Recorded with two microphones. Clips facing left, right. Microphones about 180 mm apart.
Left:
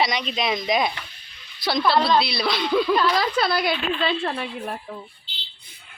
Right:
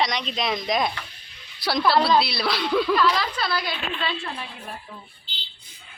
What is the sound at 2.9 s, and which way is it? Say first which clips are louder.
Speech: left 1 dB; 35° left (ahead or behind).